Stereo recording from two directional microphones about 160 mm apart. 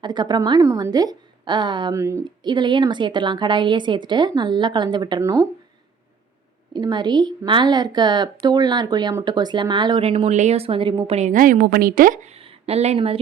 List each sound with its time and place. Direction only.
0.0 s a woman's voice: 25° right (ahead or behind)
6.7 s a woman's voice: 25° right (ahead or behind)
11.3 s a woman's voice: 60° right (ahead or behind); by 13.1 s 40° right (ahead or behind)